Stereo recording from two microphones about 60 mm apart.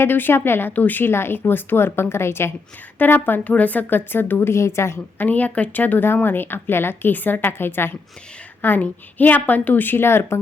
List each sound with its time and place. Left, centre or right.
0.0 s speech: left
3.2 s speech: left
5.2 s speech: left